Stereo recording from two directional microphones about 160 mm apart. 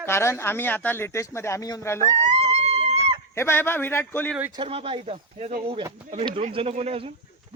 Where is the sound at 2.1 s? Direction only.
40° right (ahead or behind).